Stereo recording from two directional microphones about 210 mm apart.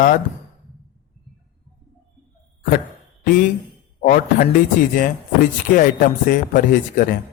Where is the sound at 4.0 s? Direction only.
40° left (ahead or behind).